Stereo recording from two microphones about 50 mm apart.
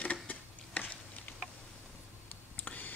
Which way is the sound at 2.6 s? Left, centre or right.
Left.